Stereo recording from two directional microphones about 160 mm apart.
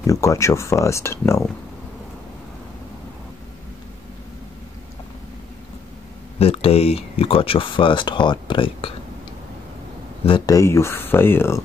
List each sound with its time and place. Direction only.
0.0 s speech: 20° left (ahead or behind)
6.4 s speech: 35° left (ahead or behind)
10.2 s speech: 25° left (ahead or behind)